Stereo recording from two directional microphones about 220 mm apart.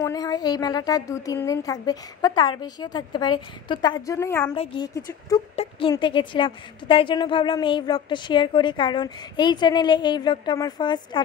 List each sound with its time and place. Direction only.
0.0 s a woman's voice: 15° left (ahead or behind)